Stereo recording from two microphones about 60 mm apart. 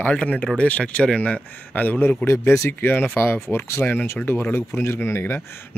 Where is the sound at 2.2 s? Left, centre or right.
Left.